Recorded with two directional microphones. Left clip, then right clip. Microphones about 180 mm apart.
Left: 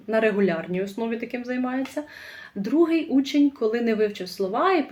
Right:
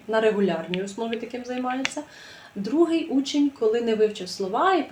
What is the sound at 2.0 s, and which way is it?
Speech, 20° left (ahead or behind).